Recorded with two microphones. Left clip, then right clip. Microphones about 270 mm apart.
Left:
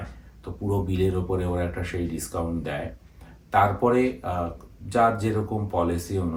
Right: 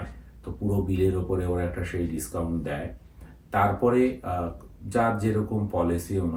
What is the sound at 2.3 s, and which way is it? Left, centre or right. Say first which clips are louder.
Speech: left 3 dB; centre.